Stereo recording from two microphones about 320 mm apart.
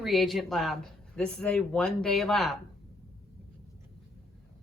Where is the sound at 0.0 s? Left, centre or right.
Centre.